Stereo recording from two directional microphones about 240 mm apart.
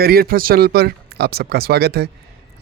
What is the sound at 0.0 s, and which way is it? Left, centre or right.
Speech, right.